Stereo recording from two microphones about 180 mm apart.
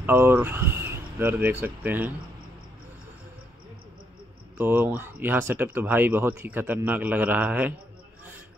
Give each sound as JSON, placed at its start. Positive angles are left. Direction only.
{"t": 0.0, "sound": "speech", "side_deg": -10}
{"t": 4.6, "sound": "speech", "side_deg": -10}